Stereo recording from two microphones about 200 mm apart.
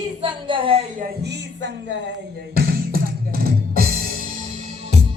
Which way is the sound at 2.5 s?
50° right (ahead or behind).